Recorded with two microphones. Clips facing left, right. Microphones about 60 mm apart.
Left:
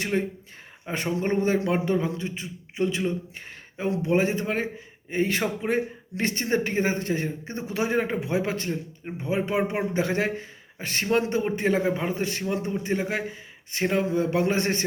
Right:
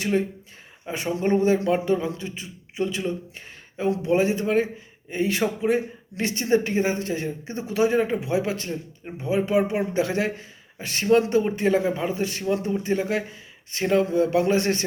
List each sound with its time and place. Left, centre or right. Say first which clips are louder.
0.0 s speech: right 3 dB; left